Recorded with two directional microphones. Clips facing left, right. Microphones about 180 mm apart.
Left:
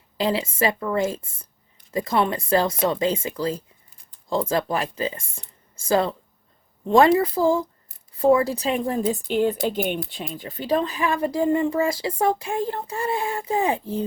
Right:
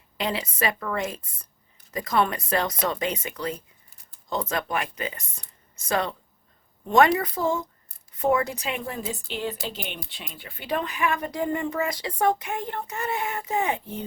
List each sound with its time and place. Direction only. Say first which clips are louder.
0.2 s speech: left 5 dB; 30° left (ahead or behind)